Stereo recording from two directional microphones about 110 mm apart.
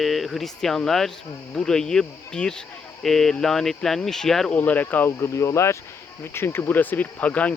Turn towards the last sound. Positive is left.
turn(degrees=15)  # may be behind; listen again after turning